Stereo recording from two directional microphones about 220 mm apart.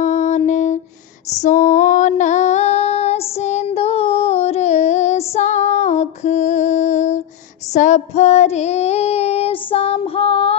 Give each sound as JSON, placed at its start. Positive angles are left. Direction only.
{"t": 0.0, "sound": "music", "side_deg": 35}
{"t": 1.4, "sound": "female singing", "side_deg": 35}
{"t": 7.7, "sound": "child singing", "side_deg": 30}